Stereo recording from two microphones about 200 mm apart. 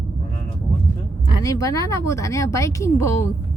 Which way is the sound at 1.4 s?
15° left (ahead or behind).